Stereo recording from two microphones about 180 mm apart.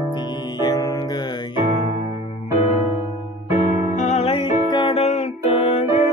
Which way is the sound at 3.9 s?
40° left (ahead or behind).